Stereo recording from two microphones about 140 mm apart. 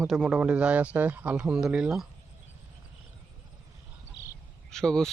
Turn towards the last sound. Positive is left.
turn(degrees=5)  # may be behind; listen again after turning